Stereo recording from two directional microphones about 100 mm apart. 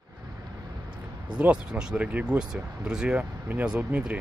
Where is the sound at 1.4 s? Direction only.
10° right (ahead or behind).